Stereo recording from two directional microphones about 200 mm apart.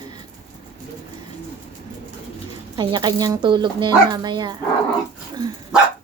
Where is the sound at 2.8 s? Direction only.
20° right (ahead or behind).